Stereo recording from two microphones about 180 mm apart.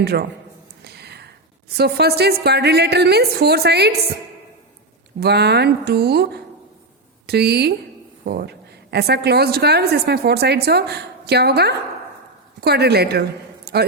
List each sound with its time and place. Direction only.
0.0 s a woman's voice: 65° right (ahead or behind)
0.9 s a sound: 65° right (ahead or behind)
1.7 s a woman's voice: 60° right (ahead or behind)
5.2 s a woman's voice: 65° right (ahead or behind)